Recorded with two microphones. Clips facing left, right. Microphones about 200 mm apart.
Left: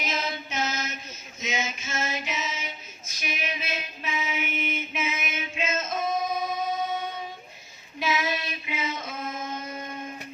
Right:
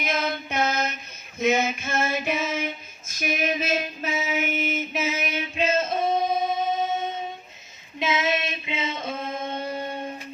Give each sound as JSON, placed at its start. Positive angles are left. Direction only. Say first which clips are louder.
{"t": 0.0, "sound": "mantra", "louder": "right 4 dB", "side_deg": -55}
{"t": 1.4, "sound": "female singing", "louder": "right 10 dB", "side_deg": -60}
{"t": 7.9, "sound": "a sound", "louder": "right 3 dB", "side_deg": -20}